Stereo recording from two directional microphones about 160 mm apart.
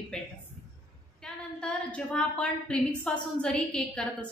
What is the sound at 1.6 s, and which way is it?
A woman's voice, 5° left (ahead or behind).